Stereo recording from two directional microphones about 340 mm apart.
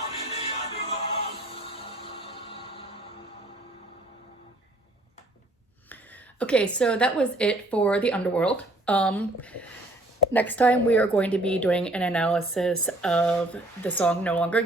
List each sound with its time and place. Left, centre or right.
0.2 s music: centre
6.4 s a woman's voice: centre